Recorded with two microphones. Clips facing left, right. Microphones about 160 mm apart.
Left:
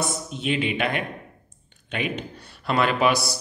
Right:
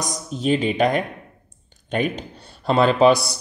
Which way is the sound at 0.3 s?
40° right (ahead or behind).